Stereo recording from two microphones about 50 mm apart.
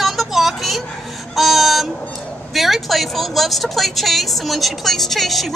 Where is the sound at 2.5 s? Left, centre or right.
Centre.